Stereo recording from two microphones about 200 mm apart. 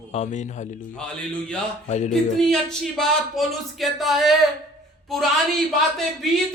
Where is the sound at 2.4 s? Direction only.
5° left (ahead or behind).